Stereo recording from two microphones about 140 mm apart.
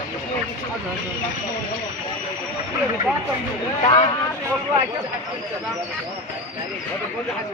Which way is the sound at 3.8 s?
45° left (ahead or behind).